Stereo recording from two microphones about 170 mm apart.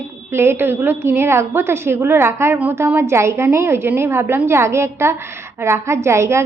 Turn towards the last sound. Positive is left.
turn(degrees=-15)  # may be behind; listen again after turning